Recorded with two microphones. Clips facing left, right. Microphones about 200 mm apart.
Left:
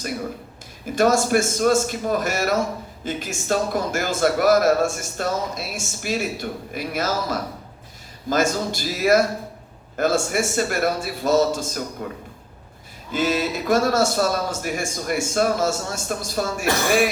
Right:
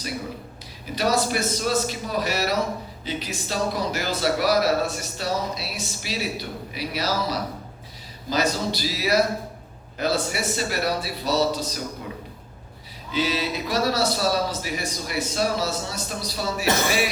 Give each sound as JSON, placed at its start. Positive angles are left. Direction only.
{"t": 0.9, "sound": "a man's voice", "side_deg": 50}
{"t": 13.1, "sound": "a man's voice", "side_deg": 50}